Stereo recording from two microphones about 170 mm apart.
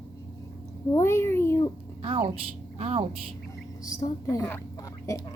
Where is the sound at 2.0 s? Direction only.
35° right (ahead or behind).